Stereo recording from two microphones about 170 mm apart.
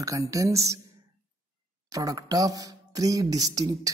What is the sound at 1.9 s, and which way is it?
Speech, 20° right (ahead or behind).